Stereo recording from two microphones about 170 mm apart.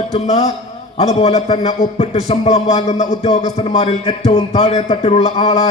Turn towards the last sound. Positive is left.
turn(degrees=35)  # may be behind; listen again after turning